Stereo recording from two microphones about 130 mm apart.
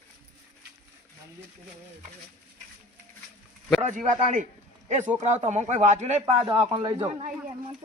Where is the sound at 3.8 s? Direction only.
70° right (ahead or behind).